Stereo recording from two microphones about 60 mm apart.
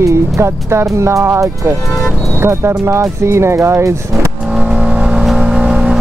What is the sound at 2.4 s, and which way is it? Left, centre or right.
Speech, right.